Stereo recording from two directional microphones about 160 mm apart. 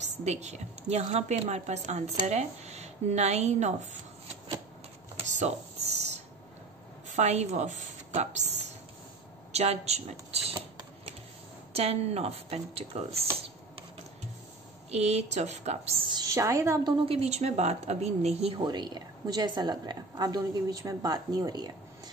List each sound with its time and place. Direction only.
0.0 s a woman's voice: 45° right (ahead or behind)
5.1 s a sound: 45° right (ahead or behind)
7.1 s a woman's voice: 45° right (ahead or behind)
9.5 s typing: 40° right (ahead or behind)
11.7 s speech: 40° right (ahead or behind)
14.9 s a woman's voice: 40° right (ahead or behind)
16.1 s a woman's voice: 20° right (ahead or behind)
17.0 s a woman's voice: 40° right (ahead or behind)
18.6 s a woman's voice: 25° right (ahead or behind)